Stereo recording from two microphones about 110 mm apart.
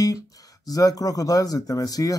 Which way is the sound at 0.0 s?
35° left (ahead or behind).